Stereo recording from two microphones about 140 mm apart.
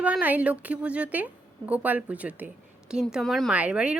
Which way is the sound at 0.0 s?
10° right (ahead or behind).